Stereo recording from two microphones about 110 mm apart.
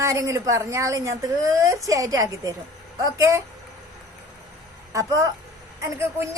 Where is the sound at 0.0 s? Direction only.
30° right (ahead or behind).